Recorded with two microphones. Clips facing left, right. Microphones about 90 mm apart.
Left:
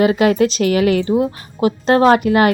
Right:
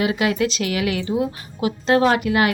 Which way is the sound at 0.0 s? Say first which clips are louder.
Left 7 dB; 40° left (ahead or behind).